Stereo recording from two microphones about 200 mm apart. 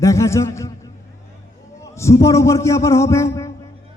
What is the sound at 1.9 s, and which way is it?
A man's voice, 15° left (ahead or behind).